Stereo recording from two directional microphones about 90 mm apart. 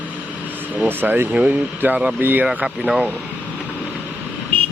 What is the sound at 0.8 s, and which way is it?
Speech, 20° right (ahead or behind).